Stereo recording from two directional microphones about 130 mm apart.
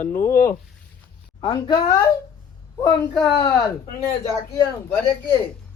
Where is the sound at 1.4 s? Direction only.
40° left (ahead or behind).